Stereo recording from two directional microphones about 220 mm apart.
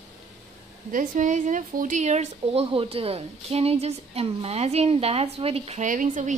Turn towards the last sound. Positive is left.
turn(degrees=-35)  # may be behind; listen again after turning